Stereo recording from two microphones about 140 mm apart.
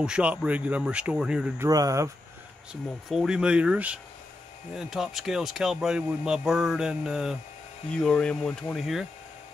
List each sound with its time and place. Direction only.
0.0 s speech: 5° right (ahead or behind)
1.6 s speech: 25° right (ahead or behind)
2.7 s speech: 5° right (ahead or behind)
7.9 s speech: 5° left (ahead or behind)